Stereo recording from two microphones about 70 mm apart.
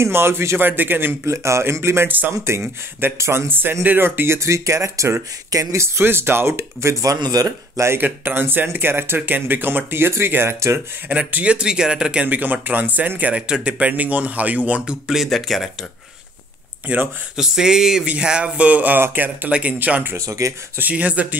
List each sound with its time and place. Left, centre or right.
0.0 s speech: right
1.3 s speech: right
3.2 s speech: right
4.4 s speech: right
5.8 s speech: right
7.2 s speech: right
7.8 s speech: right
11.1 s speech: right
15.0 s speech: centre
16.8 s speech: right
17.4 s speech: centre; by 20.2 s right
20.2 s speech: right
20.9 s speech: centre